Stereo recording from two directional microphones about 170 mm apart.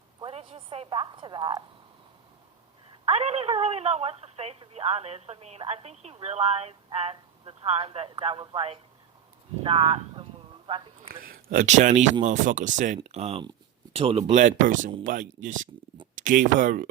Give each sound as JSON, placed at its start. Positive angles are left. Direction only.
{"t": 0.2, "sound": "speech", "side_deg": -35}
{"t": 3.1, "sound": "speech", "side_deg": -35}
{"t": 11.1, "sound": "speech", "side_deg": -60}
{"t": 13.0, "sound": "speech", "side_deg": -40}